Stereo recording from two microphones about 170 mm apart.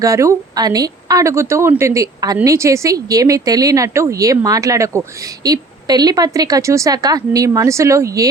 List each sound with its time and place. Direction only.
0.0 s speech: 20° right (ahead or behind)